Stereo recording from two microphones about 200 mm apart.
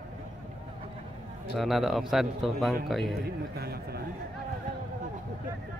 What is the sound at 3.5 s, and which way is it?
Speech, 50° right (ahead or behind).